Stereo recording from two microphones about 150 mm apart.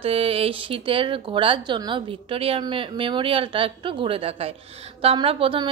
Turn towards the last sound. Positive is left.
turn(degrees=-35)  # may be behind; listen again after turning